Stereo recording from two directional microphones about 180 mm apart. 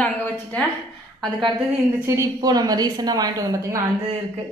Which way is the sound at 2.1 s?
20° right (ahead or behind).